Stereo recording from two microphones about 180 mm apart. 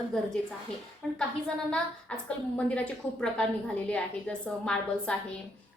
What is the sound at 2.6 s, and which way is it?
A woman's voice, 5° left (ahead or behind).